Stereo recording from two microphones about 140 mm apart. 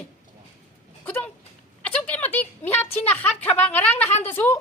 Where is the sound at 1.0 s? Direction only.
10° left (ahead or behind).